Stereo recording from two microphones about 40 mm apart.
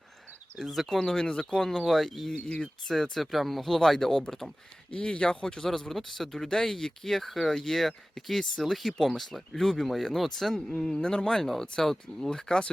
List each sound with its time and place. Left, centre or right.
0.6 s speech: centre
0.9 s speech: centre
2.4 s speech: left
2.8 s speech: centre
4.9 s speech: left; by 10.6 s centre
10.9 s speech: centre